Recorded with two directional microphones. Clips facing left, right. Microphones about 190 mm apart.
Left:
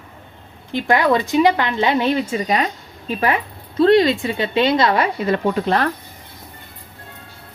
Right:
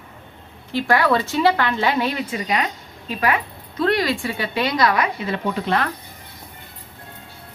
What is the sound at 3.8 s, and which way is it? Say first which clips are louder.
A woman's voice: left 7 dB; 25° left (ahead or behind).